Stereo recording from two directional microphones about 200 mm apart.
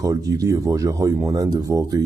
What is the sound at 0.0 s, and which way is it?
Speech, 15° right (ahead or behind).